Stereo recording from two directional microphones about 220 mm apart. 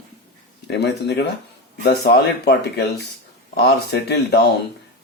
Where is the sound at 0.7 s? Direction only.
50° left (ahead or behind).